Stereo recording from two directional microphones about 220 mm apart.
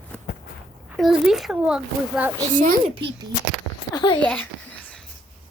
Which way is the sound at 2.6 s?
35° right (ahead or behind).